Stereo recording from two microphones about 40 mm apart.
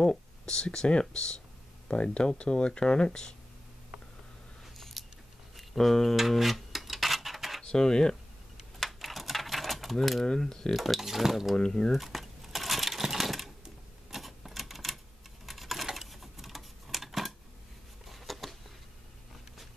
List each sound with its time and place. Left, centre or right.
0.0 s speech: centre
4.7 s a sound: centre
5.6 s speech: centre
6.1 s cutlery: centre
7.6 s speech: centre
8.7 s a sound: centre
10.2 s speech: centre
10.8 s speech: centre
11.5 s speech: centre
11.9 s sewing machine: centre
14.1 s typewriter: centre
15.4 s typing: centre
18.0 s a sound: centre